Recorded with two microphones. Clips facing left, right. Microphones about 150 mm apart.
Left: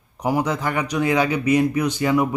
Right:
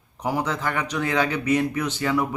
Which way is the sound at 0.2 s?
15° left (ahead or behind).